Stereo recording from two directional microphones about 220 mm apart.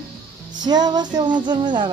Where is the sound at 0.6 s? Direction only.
20° right (ahead or behind).